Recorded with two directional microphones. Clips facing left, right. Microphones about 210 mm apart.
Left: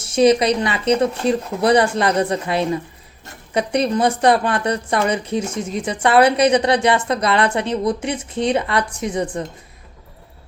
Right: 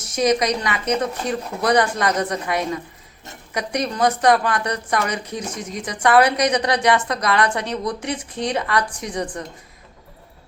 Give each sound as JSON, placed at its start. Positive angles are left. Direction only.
{"t": 0.0, "sound": "speech", "side_deg": 30}